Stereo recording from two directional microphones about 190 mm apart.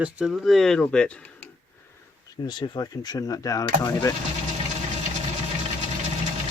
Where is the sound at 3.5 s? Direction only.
20° left (ahead or behind).